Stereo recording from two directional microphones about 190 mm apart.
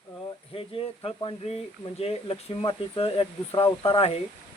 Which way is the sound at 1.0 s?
30° left (ahead or behind).